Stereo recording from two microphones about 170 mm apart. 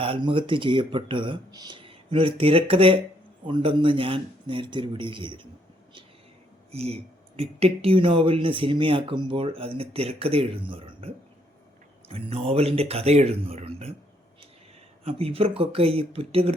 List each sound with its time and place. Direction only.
0.0 s speech: 30° right (ahead or behind)
6.7 s speech: 35° right (ahead or behind)
15.0 s speech: 35° right (ahead or behind)